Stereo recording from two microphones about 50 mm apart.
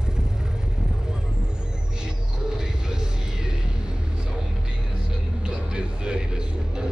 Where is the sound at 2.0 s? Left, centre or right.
Centre.